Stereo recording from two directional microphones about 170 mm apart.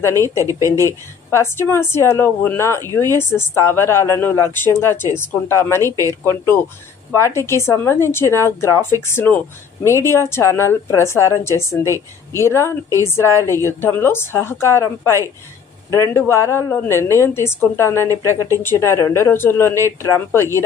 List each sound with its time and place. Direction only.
0.3 s a woman's voice: 20° right (ahead or behind)
1.3 s speech: 15° left (ahead or behind)
5.8 s a woman's voice: 20° right (ahead or behind)
6.2 s speech: 15° left (ahead or behind)
13.2 s a woman's voice: 20° right (ahead or behind)
13.7 s speech: 15° left (ahead or behind)